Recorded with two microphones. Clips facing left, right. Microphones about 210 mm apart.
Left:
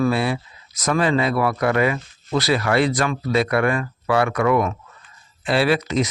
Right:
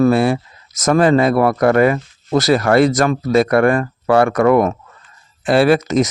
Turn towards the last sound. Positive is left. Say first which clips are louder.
# right 6 dB
turn(degrees=-45)  # may be behind; listen again after turning